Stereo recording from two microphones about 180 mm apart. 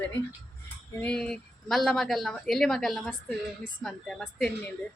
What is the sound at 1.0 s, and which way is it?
A woman's voice, 5° left (ahead or behind).